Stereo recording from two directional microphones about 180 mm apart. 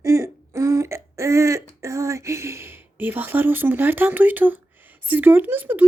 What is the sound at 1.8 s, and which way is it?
Speech, 15° right (ahead or behind).